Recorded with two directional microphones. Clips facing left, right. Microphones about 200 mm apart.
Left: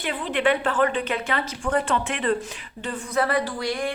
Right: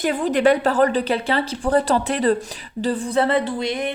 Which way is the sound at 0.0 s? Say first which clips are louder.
Right 6 dB; 40° right (ahead or behind).